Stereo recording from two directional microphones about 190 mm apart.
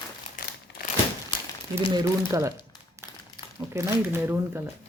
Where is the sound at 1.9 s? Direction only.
15° right (ahead or behind).